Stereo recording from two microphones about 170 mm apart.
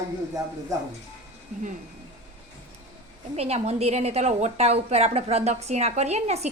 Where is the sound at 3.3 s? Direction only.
40° right (ahead or behind).